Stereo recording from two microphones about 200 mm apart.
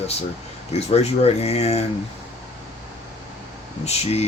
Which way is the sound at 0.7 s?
30° left (ahead or behind).